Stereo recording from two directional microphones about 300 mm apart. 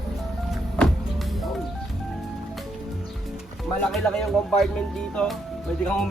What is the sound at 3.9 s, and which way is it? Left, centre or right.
Speech, centre.